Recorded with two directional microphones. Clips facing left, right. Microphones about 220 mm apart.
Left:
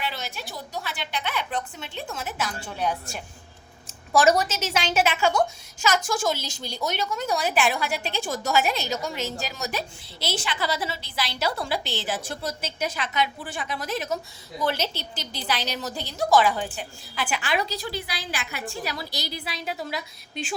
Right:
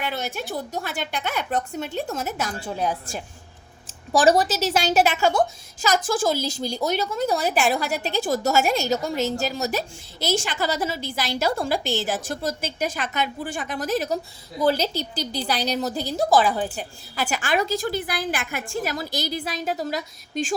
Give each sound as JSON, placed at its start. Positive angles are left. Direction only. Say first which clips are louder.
{"t": 0.0, "sound": "a woman's voice", "louder": "right 5 dB", "side_deg": -50}
{"t": 4.2, "sound": "a woman's voice", "louder": "right 3 dB", "side_deg": -35}